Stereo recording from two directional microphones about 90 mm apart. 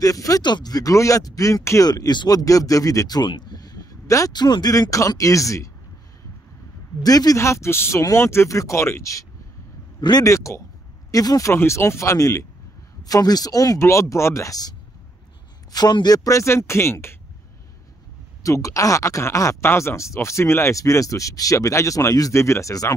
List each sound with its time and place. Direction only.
0.0 s speech: 40° left (ahead or behind)
0.4 s speech: 55° left (ahead or behind); by 1.9 s 35° left (ahead or behind)
1.9 s speech: 50° left (ahead or behind)
3.3 s a sound: 55° left (ahead or behind)
4.3 s speech: 50° left (ahead or behind); by 5.7 s 35° left (ahead or behind)
7.0 s speech: 45° left (ahead or behind)
9.9 s speech: 55° left (ahead or behind)
10.2 s speech: 35° left (ahead or behind)
13.7 s speech: 35° left (ahead or behind)
15.7 s speech: 50° left (ahead or behind)
16.3 s speech: 30° left (ahead or behind)
18.4 s speech: 35° left (ahead or behind)